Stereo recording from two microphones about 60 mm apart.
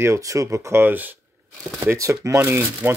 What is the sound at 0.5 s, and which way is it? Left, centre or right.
Speech, right.